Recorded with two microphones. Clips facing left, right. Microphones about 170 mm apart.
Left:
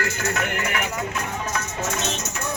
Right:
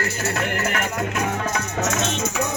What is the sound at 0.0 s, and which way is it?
Music, 30° right (ahead or behind).